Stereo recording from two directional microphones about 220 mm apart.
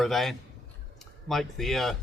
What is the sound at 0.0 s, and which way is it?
Speech, centre (ahead or behind).